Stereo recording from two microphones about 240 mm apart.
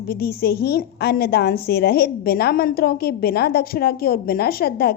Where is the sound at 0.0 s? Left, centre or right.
Left.